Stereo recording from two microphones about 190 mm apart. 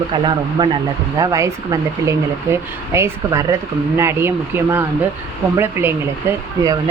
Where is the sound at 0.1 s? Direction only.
25° right (ahead or behind).